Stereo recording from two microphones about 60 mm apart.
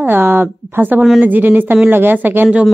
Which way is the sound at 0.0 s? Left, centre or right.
Right.